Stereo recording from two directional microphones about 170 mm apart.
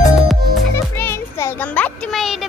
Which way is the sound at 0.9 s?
15° left (ahead or behind).